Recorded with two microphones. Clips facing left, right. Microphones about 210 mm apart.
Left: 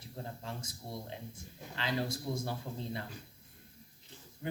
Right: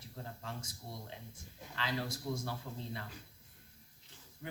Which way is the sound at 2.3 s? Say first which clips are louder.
Left 3 dB; 25° left (ahead or behind).